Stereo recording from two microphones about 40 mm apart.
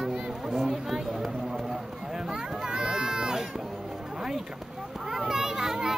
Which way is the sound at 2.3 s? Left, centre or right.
Centre.